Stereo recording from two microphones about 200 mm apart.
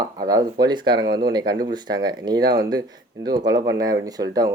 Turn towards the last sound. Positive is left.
turn(degrees=-15)  # may be behind; listen again after turning